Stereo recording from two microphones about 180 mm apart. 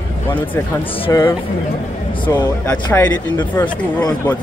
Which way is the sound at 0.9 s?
30° left (ahead or behind).